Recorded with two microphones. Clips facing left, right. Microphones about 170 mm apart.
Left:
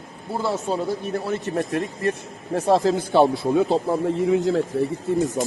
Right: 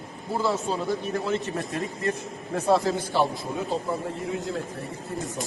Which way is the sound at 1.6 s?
65° left (ahead or behind).